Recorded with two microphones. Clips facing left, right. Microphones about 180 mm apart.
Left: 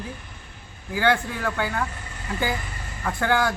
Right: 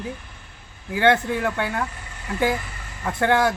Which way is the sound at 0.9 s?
25° right (ahead or behind).